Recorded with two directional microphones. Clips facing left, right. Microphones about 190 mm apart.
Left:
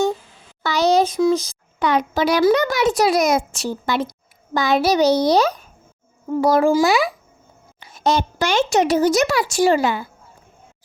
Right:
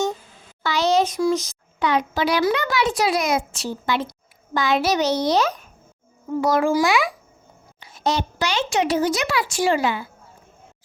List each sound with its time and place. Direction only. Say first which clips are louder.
0.6 s a sound: left 3 dB; 40° left (ahead or behind)
1.8 s a child's voice: left 2 dB; 45° left (ahead or behind)
7.8 s speech: left 4 dB; 50° left (ahead or behind)